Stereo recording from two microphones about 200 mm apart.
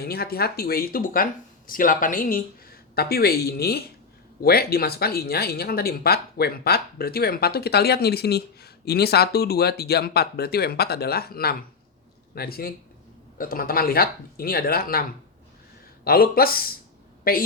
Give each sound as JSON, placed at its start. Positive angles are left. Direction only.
{"t": 0.0, "sound": "speech", "side_deg": 50}
{"t": 16.0, "sound": "speech", "side_deg": 50}